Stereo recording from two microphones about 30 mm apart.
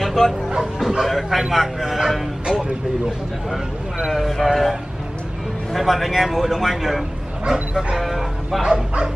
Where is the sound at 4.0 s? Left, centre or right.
Centre.